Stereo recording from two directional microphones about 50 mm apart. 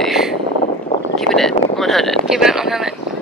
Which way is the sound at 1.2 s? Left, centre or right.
Centre.